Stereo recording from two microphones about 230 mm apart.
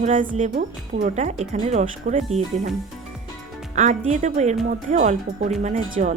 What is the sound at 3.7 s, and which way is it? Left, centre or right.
Speech, right.